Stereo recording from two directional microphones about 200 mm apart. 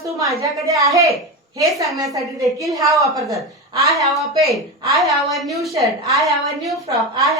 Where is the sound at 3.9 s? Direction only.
Centre (ahead or behind).